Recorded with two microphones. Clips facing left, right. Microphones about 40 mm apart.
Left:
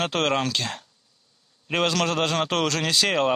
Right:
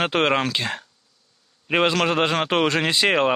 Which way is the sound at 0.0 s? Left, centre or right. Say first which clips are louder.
Right 3 dB; right.